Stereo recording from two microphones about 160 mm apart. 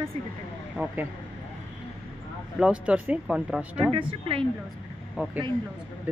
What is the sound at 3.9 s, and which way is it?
Speech, 35° right (ahead or behind).